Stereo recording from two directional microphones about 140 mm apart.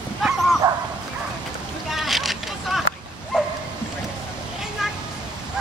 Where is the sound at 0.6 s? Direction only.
30° right (ahead or behind).